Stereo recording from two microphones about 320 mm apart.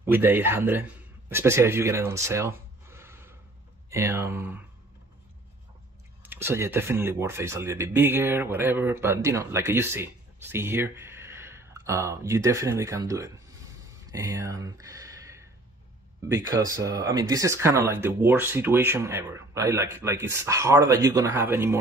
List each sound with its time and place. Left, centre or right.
0.0 s a man's voice: centre
6.2 s speech: centre
13.8 s a sound: centre
16.3 s speech: centre